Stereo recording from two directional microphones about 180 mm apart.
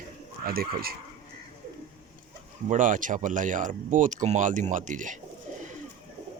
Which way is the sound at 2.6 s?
45° right (ahead or behind).